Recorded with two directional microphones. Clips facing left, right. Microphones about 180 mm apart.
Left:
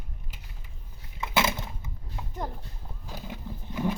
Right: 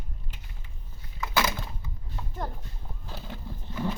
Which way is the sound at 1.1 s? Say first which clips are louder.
Left 1 dB; 25° left (ahead or behind).